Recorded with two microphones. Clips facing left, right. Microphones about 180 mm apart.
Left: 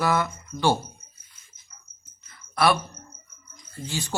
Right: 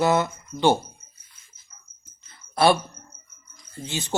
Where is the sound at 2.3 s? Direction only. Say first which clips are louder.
Right 3 dB; 25° right (ahead or behind).